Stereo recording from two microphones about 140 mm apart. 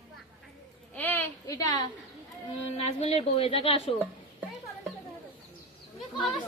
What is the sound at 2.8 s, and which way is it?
A woman's voice, 50° left (ahead or behind).